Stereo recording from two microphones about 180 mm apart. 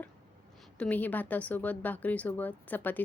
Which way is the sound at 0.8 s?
10° left (ahead or behind).